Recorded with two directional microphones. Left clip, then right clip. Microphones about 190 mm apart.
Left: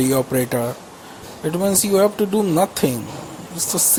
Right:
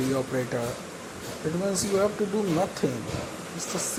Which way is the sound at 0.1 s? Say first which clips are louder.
Left 8 dB; 40° left (ahead or behind).